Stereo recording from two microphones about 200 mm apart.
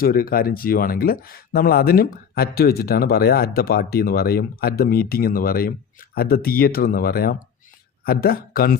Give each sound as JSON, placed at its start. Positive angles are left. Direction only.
{"t": 0.0, "sound": "speech", "side_deg": 45}